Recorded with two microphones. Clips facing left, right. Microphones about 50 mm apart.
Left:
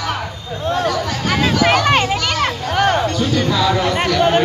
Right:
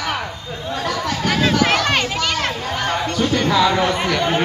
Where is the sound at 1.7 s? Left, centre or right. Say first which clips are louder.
Left 4 dB; centre.